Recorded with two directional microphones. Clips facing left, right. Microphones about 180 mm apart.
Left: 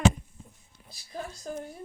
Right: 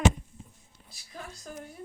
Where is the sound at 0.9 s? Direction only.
30° left (ahead or behind).